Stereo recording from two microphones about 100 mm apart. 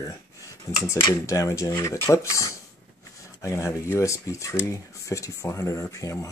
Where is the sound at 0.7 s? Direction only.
30° left (ahead or behind).